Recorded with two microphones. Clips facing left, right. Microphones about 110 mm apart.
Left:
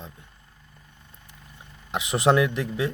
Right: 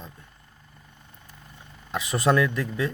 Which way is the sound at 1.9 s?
20° left (ahead or behind).